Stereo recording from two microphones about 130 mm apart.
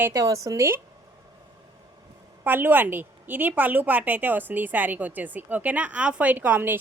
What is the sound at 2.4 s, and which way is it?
A woman's voice, 15° right (ahead or behind).